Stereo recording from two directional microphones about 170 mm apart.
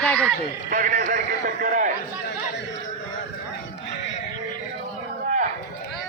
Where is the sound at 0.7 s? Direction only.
50° right (ahead or behind).